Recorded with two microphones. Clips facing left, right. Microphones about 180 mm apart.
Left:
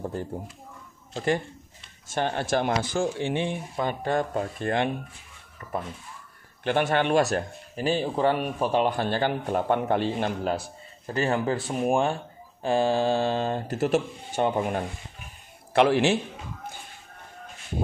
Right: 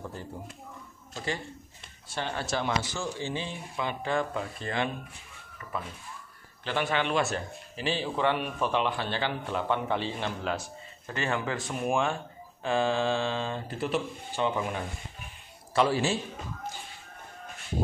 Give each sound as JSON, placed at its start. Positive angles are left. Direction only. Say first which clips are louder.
{"t": 1.1, "sound": "a man's voice", "louder": "left 8 dB", "side_deg": 50}
{"t": 3.7, "sound": "a man's voice", "louder": "left 2 dB", "side_deg": 45}
{"t": 5.6, "sound": "speech", "louder": "left 5 dB", "side_deg": 20}
{"t": 6.6, "sound": "a man's voice", "louder": "left 5 dB", "side_deg": 50}
{"t": 10.5, "sound": "a man's voice", "louder": "left 4 dB", "side_deg": 30}
{"t": 15.7, "sound": "a man's voice", "louder": "left 5 dB", "side_deg": 65}